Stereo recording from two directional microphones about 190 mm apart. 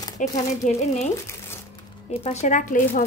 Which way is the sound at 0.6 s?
35° left (ahead or behind).